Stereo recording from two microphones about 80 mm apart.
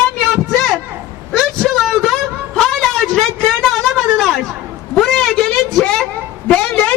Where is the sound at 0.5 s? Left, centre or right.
Centre.